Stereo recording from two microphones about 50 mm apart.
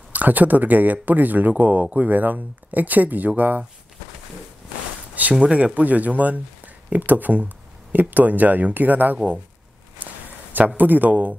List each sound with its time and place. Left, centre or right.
0.1 s speech: right
5.3 s speech: right
10.0 s a sound: right
10.8 s speech: right